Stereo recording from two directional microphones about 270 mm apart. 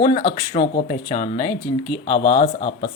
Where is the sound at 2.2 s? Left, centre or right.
Left.